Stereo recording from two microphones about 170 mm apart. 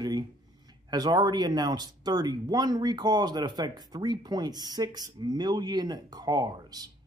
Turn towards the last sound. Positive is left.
turn(degrees=-25)  # may be behind; listen again after turning